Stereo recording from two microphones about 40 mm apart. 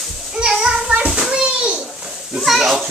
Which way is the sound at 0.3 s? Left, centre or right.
Centre.